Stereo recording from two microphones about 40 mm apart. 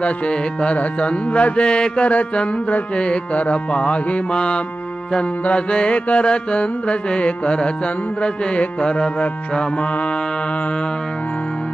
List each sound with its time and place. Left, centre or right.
0.0 s mantra: left